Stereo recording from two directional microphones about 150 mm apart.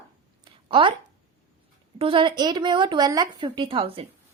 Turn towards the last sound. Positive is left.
turn(degrees=-40)  # may be behind; listen again after turning